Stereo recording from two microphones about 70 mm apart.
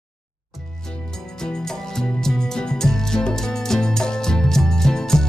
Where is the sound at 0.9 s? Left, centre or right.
Centre.